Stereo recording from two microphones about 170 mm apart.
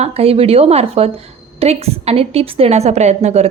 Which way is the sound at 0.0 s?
35° right (ahead or behind).